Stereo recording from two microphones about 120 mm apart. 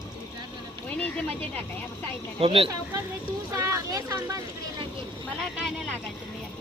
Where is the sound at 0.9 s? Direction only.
10° left (ahead or behind).